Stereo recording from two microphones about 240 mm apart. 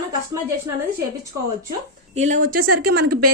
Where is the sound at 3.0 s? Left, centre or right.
Right.